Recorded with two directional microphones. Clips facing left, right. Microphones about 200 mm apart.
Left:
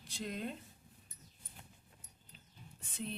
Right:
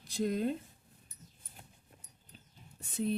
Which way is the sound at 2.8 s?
40° right (ahead or behind).